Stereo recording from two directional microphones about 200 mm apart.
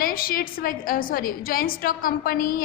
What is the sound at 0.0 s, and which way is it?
A woman's voice, 45° left (ahead or behind).